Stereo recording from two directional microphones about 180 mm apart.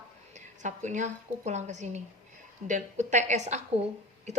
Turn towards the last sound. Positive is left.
turn(degrees=-40)  # may be behind; listen again after turning